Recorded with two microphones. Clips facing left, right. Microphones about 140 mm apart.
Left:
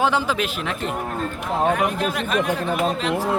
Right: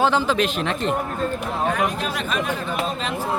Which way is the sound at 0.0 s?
10° left (ahead or behind).